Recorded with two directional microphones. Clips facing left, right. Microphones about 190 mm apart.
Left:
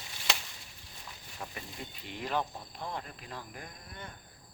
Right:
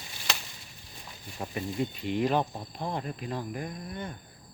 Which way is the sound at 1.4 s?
20° right (ahead or behind).